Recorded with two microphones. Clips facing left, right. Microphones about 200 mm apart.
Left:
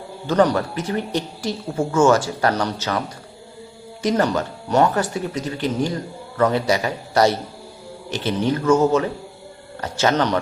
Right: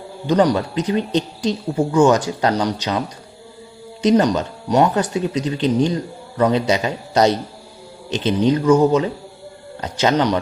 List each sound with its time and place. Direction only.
0.3 s speech: 15° right (ahead or behind)
4.0 s speech: 15° right (ahead or behind)